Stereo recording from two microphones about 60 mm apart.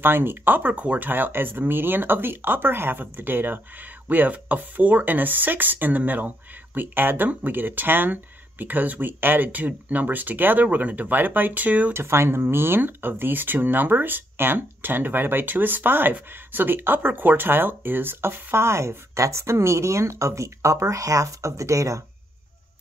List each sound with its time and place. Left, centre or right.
0.0 s speech: right
11.9 s speech: right